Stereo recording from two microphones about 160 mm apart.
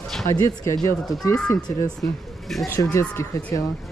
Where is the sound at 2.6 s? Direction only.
15° left (ahead or behind).